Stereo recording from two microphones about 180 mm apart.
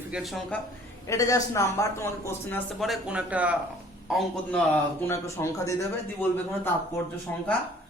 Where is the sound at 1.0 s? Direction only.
20° left (ahead or behind).